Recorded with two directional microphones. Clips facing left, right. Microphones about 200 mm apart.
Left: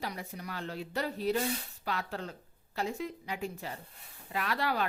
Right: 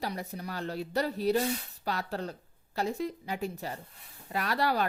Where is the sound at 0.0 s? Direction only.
35° right (ahead or behind).